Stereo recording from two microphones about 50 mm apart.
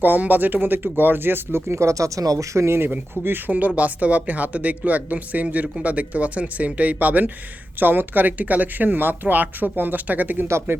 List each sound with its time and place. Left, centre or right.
0.0 s speech: right
2.9 s speech: right
10.7 s speech: right